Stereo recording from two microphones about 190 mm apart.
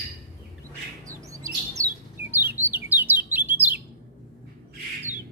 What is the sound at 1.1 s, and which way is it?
Bird, 15° right (ahead or behind).